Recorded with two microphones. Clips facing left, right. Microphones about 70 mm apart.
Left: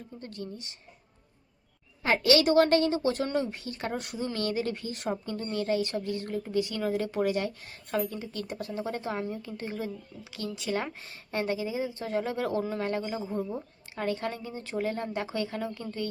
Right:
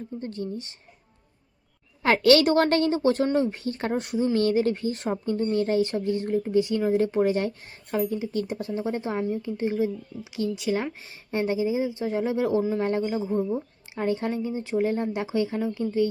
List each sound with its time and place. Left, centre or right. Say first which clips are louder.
0.2 s speech: right 7 dB; right
2.0 s a woman's voice: right 5 dB; right
2.5 s speech: right 1 dB; right
4.4 s speech: right 7 dB; right
7.9 s speech: right 5 dB; centre